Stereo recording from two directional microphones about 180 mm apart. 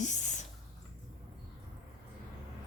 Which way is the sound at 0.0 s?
40° left (ahead or behind).